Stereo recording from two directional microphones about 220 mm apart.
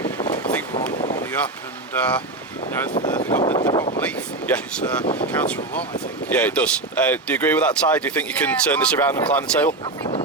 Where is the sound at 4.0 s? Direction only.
5° left (ahead or behind).